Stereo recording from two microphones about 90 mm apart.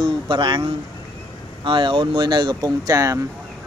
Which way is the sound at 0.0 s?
65° right (ahead or behind).